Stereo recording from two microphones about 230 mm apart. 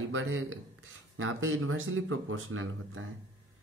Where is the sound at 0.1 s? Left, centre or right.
Right.